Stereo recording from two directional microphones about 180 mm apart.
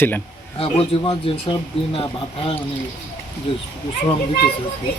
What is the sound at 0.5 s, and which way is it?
A man's voice, 30° left (ahead or behind).